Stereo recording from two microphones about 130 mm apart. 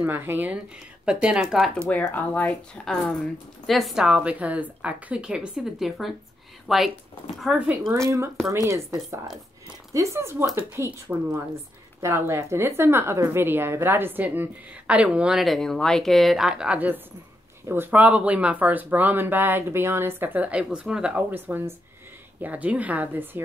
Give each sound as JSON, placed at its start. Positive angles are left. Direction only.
{"t": 0.0, "sound": "a woman's voice", "side_deg": -15}
{"t": 1.9, "sound": "a woman's voice", "side_deg": 15}
{"t": 8.5, "sound": "a woman's voice", "side_deg": -25}